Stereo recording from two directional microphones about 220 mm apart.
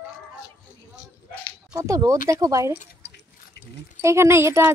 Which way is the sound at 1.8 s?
15° right (ahead or behind).